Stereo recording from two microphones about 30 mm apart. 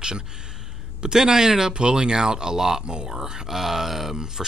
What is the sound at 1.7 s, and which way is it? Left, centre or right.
Speech, right.